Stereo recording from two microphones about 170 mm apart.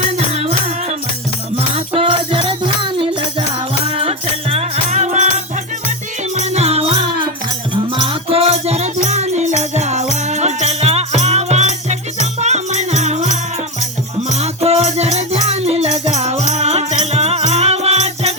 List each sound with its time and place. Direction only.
0.2 s music: 40° right (ahead or behind)
3.9 s music: 35° right (ahead or behind)
6.3 s music: 40° right (ahead or behind)